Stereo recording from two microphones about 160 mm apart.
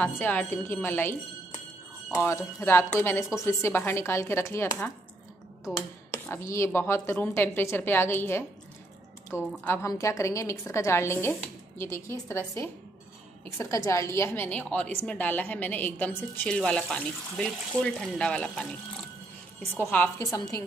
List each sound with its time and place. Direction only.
0.0 s a woman's voice: 10° left (ahead or behind)
6.1 s a woman's voice: 15° left (ahead or behind)